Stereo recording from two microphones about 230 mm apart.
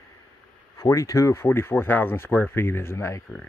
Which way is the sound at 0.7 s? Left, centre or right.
Centre.